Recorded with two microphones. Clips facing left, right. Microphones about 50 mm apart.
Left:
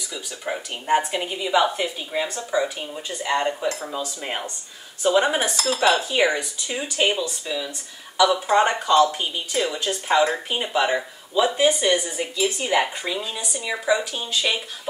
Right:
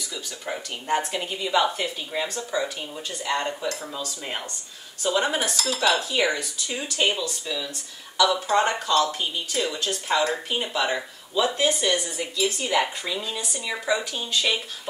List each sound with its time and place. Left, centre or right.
0.1 s a woman's voice: centre
12.8 s a woman's voice: centre